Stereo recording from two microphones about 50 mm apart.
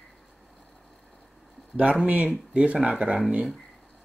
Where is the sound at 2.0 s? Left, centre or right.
Right.